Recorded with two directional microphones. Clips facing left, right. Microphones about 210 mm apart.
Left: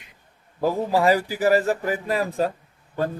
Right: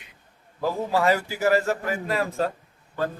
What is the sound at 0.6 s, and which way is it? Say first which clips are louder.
A man's voice: left 3 dB; 15° left (ahead or behind).